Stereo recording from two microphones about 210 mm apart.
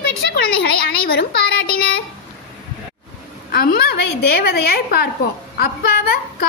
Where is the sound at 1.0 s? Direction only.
45° left (ahead or behind).